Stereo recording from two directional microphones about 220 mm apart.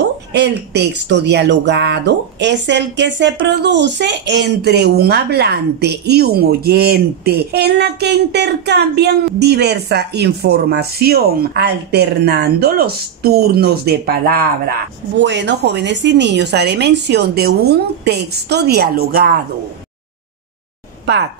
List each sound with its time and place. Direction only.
0.3 s speech: 50° right (ahead or behind)
15.1 s speech: 55° right (ahead or behind)
21.0 s a sound: 50° right (ahead or behind)